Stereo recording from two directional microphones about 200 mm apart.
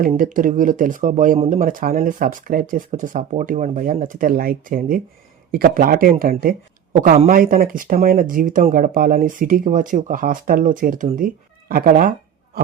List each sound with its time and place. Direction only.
0.0 s speech: 45° right (ahead or behind)